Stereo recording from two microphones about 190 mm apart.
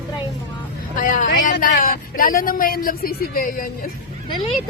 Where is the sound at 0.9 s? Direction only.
45° left (ahead or behind).